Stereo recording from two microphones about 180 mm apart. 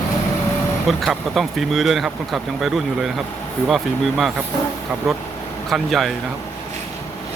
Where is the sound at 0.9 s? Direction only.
Centre (ahead or behind).